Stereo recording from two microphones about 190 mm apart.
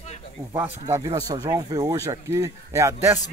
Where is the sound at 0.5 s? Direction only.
15° right (ahead or behind).